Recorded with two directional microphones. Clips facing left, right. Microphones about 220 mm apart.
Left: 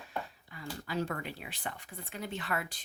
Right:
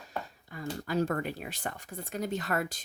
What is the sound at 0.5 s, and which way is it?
Speech, 45° right (ahead or behind).